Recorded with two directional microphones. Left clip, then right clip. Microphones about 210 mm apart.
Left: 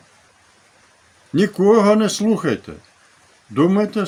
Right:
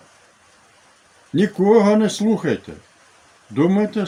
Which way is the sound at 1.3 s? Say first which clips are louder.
Left 1 dB; 10° left (ahead or behind).